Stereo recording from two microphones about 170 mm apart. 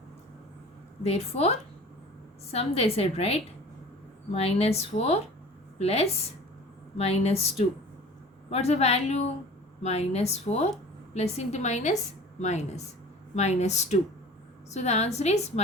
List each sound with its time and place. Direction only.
1.0 s a woman's voice: 40° left (ahead or behind)
4.4 s a woman's voice: 35° left (ahead or behind)